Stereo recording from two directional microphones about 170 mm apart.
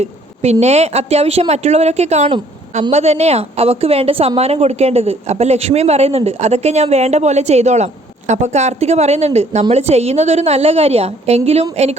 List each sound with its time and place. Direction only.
0.0 s a woman's voice: 40° right (ahead or behind)